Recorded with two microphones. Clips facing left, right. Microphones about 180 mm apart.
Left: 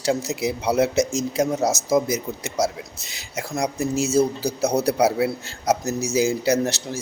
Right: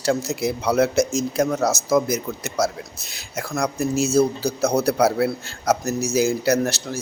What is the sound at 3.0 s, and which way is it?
Speech, 60° right (ahead or behind).